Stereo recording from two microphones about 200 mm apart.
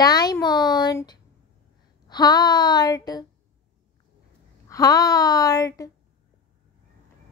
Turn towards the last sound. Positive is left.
turn(degrees=15)  # may be behind; listen again after turning